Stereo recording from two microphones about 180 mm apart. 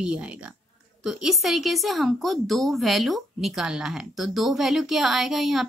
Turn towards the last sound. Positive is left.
turn(degrees=0)  # may be behind; listen again after turning